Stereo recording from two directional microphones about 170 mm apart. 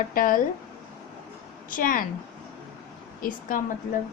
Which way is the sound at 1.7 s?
55° left (ahead or behind).